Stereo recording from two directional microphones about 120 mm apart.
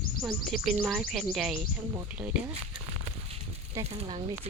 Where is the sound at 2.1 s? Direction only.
10° right (ahead or behind).